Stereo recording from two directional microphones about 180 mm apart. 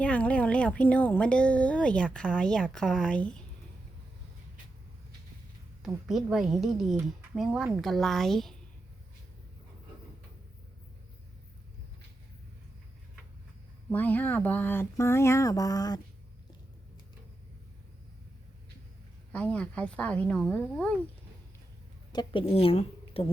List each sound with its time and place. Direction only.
0.0 s a woman's voice: 5° left (ahead or behind)
5.8 s a woman's voice: centre (ahead or behind)
13.9 s speech: 10° left (ahead or behind)
19.3 s speech: 5° left (ahead or behind)
22.1 s a woman's voice: 25° left (ahead or behind)